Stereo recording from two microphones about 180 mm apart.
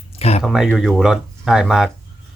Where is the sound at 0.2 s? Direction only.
35° left (ahead or behind).